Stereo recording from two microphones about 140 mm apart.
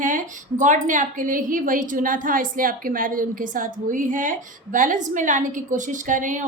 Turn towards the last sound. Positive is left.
turn(degrees=-65)  # may be behind; listen again after turning